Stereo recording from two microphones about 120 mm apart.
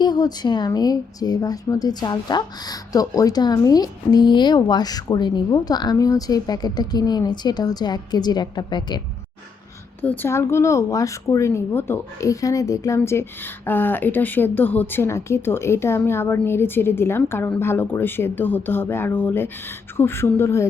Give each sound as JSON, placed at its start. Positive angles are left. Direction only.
{"t": 0.0, "sound": "a woman's voice", "side_deg": 35}
{"t": 10.0, "sound": "speech", "side_deg": 15}